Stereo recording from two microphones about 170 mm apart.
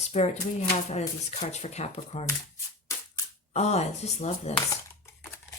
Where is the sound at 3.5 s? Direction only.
40° left (ahead or behind).